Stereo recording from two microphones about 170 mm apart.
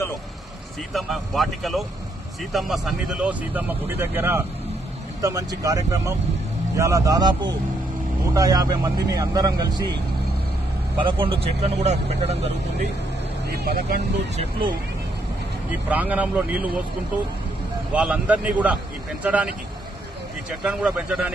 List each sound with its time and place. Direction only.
0.9 s speech: centre (ahead or behind); by 9.8 s 25° right (ahead or behind)
11.0 s speech: 30° right (ahead or behind)
13.5 s speech: 65° right (ahead or behind)
14.3 s speech: 35° right (ahead or behind)
15.9 s speech: 10° right (ahead or behind)
17.9 s speech: 5° right (ahead or behind)